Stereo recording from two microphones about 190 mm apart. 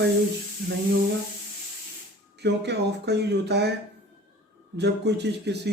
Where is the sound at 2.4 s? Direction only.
60° right (ahead or behind).